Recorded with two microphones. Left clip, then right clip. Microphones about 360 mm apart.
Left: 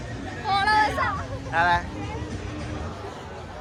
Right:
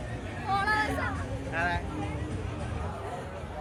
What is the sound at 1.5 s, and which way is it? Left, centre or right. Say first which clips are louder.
Speech: left 9 dB; centre.